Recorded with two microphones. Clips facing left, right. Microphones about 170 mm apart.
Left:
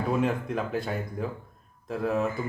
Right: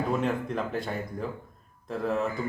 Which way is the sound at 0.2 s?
5° left (ahead or behind).